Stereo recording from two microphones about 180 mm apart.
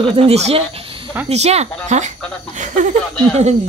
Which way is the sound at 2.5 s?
45° right (ahead or behind).